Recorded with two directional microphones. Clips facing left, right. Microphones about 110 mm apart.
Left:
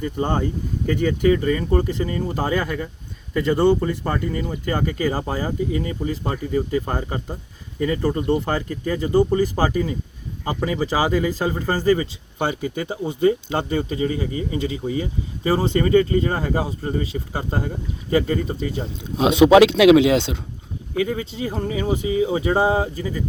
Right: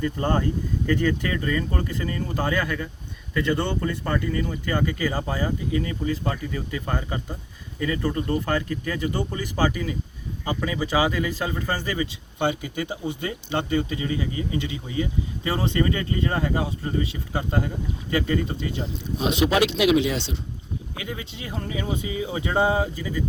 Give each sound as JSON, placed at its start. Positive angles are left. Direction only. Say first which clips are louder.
{"t": 0.0, "sound": "speech", "louder": "left 1 dB", "side_deg": 20}
{"t": 19.5, "sound": "speech", "louder": "left 9 dB", "side_deg": 90}
{"t": 21.0, "sound": "speech", "louder": "left 14 dB", "side_deg": 35}